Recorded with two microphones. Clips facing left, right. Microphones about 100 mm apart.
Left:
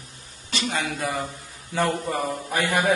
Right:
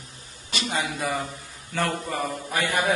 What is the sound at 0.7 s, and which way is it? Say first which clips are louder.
Speech: right 1 dB; 10° right (ahead or behind).